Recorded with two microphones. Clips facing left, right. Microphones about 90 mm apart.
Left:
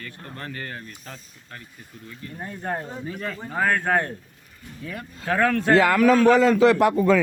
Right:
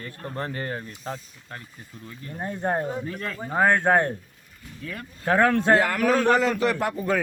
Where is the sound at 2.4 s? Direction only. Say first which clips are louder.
Right 4 dB; 25° right (ahead or behind).